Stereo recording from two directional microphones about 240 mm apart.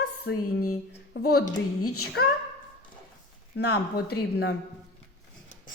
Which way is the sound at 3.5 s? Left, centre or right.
Left.